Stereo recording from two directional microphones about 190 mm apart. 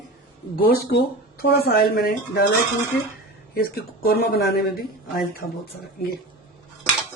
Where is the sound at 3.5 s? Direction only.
50° left (ahead or behind).